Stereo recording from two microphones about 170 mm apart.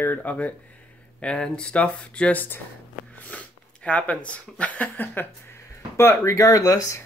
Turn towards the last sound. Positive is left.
turn(degrees=20)  # may be behind; listen again after turning